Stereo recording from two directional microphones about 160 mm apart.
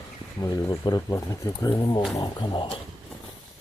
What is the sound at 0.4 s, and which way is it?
Speech, 20° left (ahead or behind).